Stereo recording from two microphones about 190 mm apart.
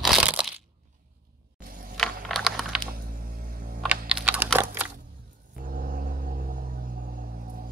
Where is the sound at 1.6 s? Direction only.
50° right (ahead or behind).